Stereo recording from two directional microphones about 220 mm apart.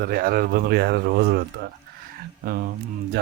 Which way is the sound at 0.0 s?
45° right (ahead or behind).